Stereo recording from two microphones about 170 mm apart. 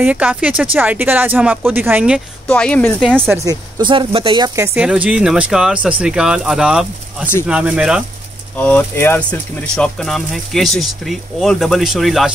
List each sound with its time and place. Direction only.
0.0 s speech: 10° right (ahead or behind)
2.4 s speech: 5° left (ahead or behind)
3.3 s speech: 20° right (ahead or behind)
4.7 s speech: 5° right (ahead or behind)
8.5 s speech: 10° left (ahead or behind)